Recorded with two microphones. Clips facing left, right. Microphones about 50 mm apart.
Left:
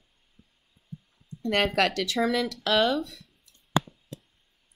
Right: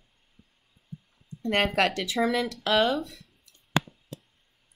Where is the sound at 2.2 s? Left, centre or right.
Centre.